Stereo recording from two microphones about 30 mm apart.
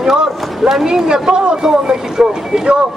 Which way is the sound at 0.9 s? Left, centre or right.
Right.